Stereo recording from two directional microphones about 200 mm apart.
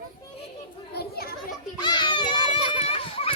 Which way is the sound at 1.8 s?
20° left (ahead or behind).